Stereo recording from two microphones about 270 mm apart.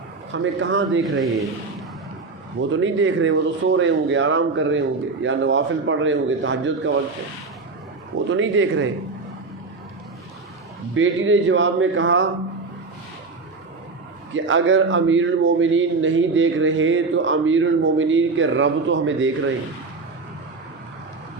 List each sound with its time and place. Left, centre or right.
0.3 s a man's voice: right
2.6 s a man's voice: right
8.3 s a man's voice: right
10.9 s a man's voice: right
14.3 s a man's voice: right